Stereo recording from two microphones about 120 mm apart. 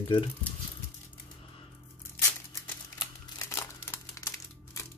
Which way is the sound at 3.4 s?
25° left (ahead or behind).